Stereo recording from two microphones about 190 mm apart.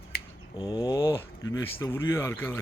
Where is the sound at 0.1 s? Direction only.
55° left (ahead or behind).